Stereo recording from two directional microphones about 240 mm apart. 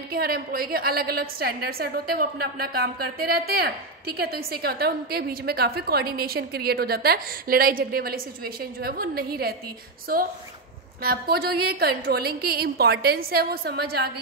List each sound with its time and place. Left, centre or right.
0.1 s a woman's voice: right